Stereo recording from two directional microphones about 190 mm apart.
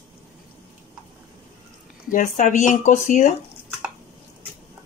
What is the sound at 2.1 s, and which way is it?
Speech, 40° left (ahead or behind).